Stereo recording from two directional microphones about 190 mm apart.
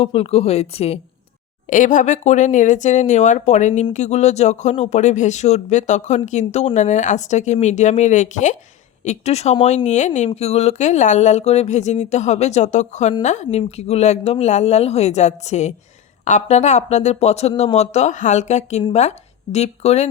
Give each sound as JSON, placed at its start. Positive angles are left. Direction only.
{"t": 0.0, "sound": "speech", "side_deg": 30}